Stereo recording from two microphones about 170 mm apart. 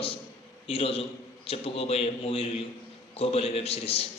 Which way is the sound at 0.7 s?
35° left (ahead or behind).